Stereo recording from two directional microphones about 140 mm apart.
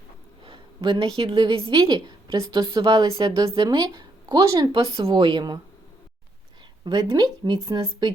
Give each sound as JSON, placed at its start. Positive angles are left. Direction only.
{"t": 0.4, "sound": "a woman's voice", "side_deg": -35}
{"t": 6.8, "sound": "speech", "side_deg": -30}